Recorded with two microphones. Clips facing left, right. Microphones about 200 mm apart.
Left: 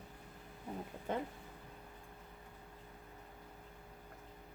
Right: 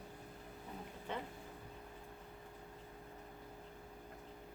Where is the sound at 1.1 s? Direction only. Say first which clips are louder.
Left 5 dB; 45° left (ahead or behind).